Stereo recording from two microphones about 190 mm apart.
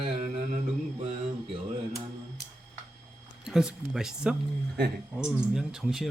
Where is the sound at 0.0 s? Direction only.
35° right (ahead or behind).